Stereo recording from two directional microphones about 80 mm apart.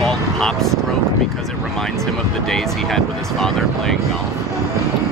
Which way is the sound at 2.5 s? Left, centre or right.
Centre.